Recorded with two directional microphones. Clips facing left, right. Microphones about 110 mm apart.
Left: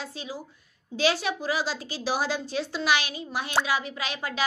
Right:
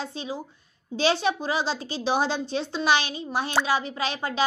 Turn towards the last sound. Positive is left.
turn(degrees=-30)  # may be behind; listen again after turning